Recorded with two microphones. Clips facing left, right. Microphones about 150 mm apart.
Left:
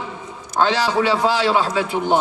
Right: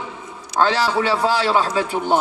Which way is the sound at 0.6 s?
15° left (ahead or behind).